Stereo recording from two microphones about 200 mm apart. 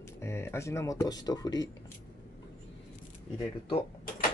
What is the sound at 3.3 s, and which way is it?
Speech, 25° left (ahead or behind).